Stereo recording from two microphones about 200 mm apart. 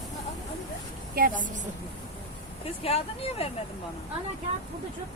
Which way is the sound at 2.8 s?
30° left (ahead or behind).